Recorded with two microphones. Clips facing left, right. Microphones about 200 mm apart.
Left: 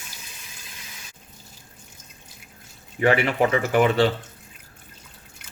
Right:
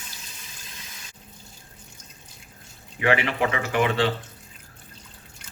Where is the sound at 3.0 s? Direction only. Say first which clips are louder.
Left 3 dB; 40° left (ahead or behind).